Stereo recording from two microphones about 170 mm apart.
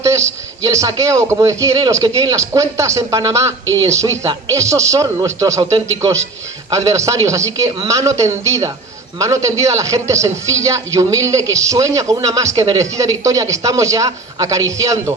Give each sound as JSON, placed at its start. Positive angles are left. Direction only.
{"t": 0.0, "sound": "a man's voice", "side_deg": -15}
{"t": 6.7, "sound": "a man's voice", "side_deg": -20}